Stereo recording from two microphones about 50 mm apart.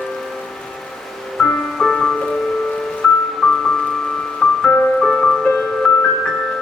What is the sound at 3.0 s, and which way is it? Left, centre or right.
Music, left.